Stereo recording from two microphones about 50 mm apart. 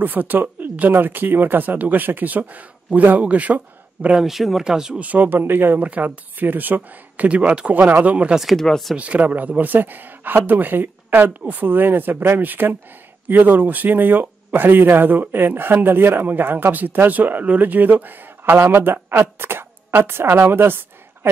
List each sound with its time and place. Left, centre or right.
0.0 s speech: right
4.2 s speech: centre
4.9 s speech: right
5.8 s speech: right
8.5 s speech: centre
8.9 s speech: right